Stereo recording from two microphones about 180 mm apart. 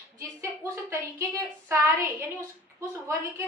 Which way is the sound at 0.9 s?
15° right (ahead or behind).